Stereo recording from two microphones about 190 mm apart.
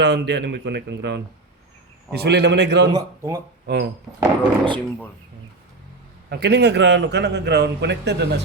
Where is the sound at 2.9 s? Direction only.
15° right (ahead or behind).